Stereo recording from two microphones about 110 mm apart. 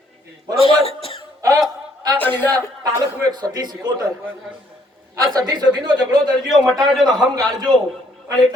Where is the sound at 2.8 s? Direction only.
40° right (ahead or behind).